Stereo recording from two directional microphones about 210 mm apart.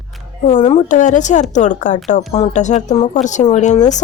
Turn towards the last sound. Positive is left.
turn(degrees=35)  # may be behind; listen again after turning